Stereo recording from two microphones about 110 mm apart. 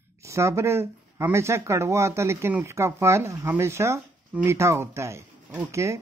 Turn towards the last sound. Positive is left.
turn(degrees=-25)  # may be behind; listen again after turning